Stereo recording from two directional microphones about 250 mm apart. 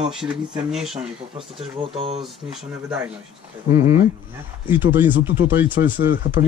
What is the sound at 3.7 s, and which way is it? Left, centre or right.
Speech, centre.